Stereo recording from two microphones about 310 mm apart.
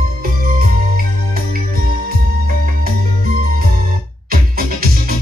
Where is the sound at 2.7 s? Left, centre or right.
Right.